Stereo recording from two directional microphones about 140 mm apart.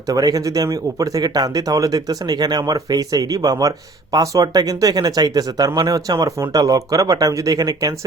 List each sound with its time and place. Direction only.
0.1 s speech: 25° right (ahead or behind)